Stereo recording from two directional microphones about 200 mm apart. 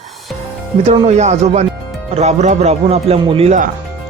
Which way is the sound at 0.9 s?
35° right (ahead or behind).